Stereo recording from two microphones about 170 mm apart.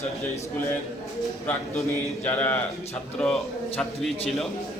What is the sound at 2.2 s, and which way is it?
A man's voice, 10° left (ahead or behind).